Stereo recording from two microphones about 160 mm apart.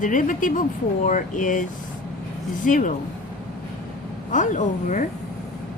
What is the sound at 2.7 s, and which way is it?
Speech, 55° left (ahead or behind).